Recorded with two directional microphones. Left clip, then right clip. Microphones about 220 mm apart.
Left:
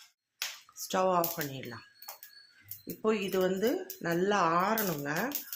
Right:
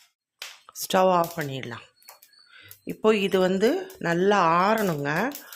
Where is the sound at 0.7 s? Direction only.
40° right (ahead or behind).